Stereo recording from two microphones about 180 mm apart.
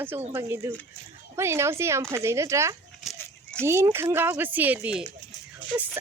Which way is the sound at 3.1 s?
Centre (ahead or behind).